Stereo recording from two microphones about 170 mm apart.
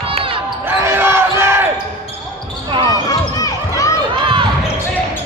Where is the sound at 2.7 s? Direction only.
25° right (ahead or behind).